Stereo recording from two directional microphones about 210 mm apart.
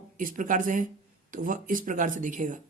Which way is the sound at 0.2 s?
40° right (ahead or behind).